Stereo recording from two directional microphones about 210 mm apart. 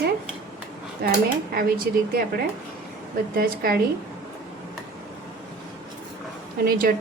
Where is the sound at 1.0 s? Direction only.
45° right (ahead or behind).